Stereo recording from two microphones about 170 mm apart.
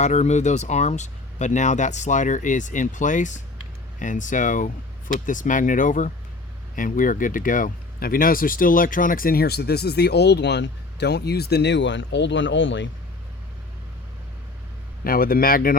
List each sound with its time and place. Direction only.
0.0 s speech: 40° left (ahead or behind); by 12.9 s 90° left
15.0 s speech: 60° left (ahead or behind)